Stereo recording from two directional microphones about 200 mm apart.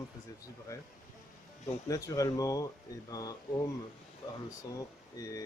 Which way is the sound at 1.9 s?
15° left (ahead or behind).